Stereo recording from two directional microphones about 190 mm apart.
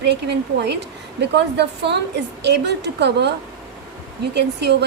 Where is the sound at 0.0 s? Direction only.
60° right (ahead or behind).